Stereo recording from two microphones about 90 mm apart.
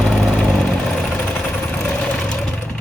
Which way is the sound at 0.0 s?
Centre (ahead or behind).